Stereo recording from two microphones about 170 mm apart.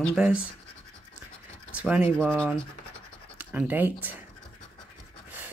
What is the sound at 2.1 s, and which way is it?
Speech, 5° left (ahead or behind).